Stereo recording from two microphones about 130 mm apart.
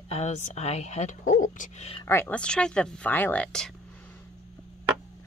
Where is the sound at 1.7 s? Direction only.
50° left (ahead or behind).